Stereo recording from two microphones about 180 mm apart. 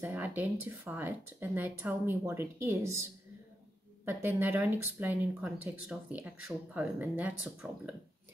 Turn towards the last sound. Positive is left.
turn(degrees=-5)  # may be behind; listen again after turning